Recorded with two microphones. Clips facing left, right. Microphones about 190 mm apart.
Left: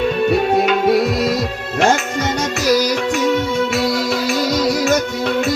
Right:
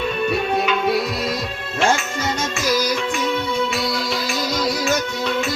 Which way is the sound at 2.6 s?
40° left (ahead or behind).